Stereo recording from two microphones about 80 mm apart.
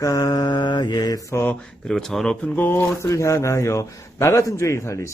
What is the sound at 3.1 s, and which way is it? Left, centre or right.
A man's voice, left.